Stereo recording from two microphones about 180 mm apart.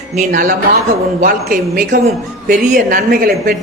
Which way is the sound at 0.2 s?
45° right (ahead or behind).